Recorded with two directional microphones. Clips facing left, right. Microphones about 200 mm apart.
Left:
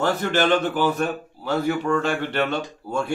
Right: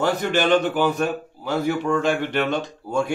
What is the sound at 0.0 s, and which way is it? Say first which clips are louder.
A man's voice: even; 15° right (ahead or behind).